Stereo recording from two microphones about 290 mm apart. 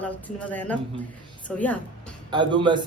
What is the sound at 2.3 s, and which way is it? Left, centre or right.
Speech, centre.